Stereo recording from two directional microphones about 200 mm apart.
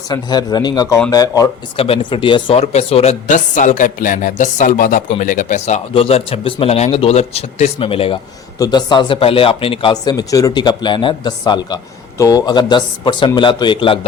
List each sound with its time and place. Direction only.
0.1 s speech: 20° left (ahead or behind)